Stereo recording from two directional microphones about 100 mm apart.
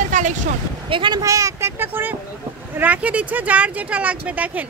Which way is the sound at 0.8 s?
55° right (ahead or behind).